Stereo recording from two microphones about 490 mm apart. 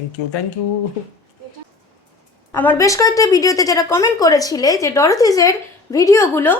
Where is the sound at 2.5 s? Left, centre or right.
Centre.